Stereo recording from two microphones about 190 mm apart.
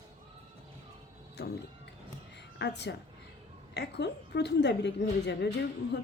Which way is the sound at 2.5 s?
65° left (ahead or behind).